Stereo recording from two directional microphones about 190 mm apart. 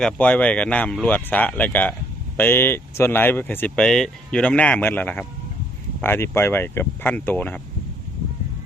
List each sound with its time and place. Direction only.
0.0 s speech: 5° left (ahead or behind)